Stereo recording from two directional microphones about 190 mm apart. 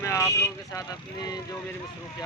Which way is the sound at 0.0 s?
15° left (ahead or behind).